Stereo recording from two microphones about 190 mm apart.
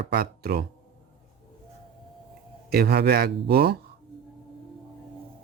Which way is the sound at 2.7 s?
55° right (ahead or behind).